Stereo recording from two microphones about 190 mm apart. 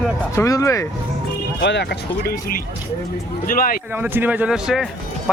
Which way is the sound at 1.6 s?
65° left (ahead or behind).